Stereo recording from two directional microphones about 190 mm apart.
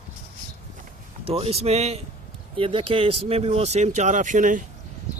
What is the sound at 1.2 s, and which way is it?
Speech, 30° right (ahead or behind).